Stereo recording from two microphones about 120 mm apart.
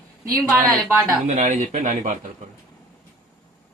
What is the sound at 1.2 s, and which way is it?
Speech, 85° right.